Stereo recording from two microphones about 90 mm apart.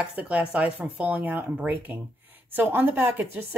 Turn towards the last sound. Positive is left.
turn(degrees=-20)  # may be behind; listen again after turning